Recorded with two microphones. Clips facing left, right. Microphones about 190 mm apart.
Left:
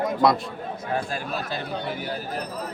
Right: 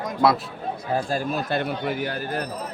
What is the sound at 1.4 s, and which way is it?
Speech, 65° right (ahead or behind).